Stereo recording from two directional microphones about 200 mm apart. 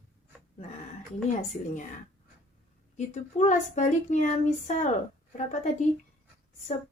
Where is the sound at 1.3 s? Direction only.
40° left (ahead or behind).